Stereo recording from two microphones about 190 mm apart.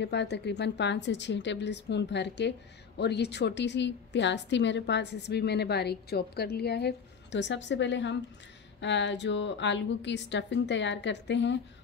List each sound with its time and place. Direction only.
0.0 s a woman's voice: 65° left (ahead or behind)